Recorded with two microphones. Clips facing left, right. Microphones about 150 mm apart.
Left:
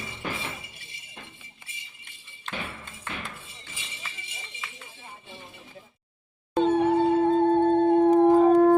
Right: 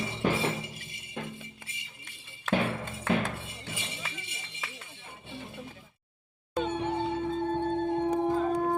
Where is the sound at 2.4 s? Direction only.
85° right.